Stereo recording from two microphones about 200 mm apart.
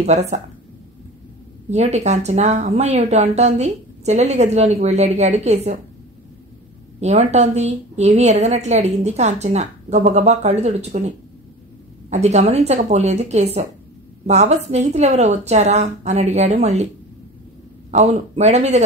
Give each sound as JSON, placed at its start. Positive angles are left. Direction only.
{"t": 0.0, "sound": "a woman's voice", "side_deg": -35}
{"t": 1.7, "sound": "a woman's voice", "side_deg": -35}
{"t": 7.0, "sound": "a woman's voice", "side_deg": -35}
{"t": 17.9, "sound": "a woman's voice", "side_deg": -35}